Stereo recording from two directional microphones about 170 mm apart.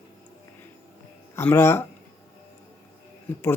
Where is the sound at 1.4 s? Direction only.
15° left (ahead or behind).